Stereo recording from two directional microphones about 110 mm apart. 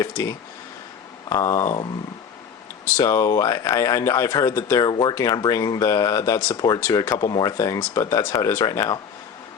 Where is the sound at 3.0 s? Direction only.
30° left (ahead or behind).